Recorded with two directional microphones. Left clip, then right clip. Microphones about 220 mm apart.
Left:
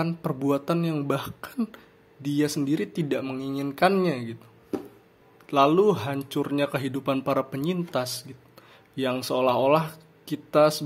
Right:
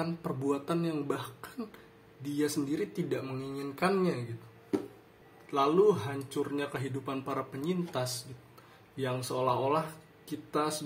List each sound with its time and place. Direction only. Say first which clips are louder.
0.0 s speech: left 6 dB; 35° left (ahead or behind)
5.5 s speech: left 6 dB; 45° left (ahead or behind)